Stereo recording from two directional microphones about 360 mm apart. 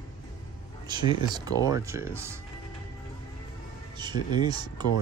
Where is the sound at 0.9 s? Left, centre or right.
Centre.